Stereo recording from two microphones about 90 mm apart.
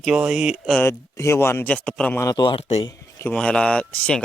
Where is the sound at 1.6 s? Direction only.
5° left (ahead or behind).